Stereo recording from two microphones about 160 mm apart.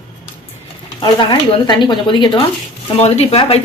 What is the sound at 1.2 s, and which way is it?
Speech, 30° left (ahead or behind).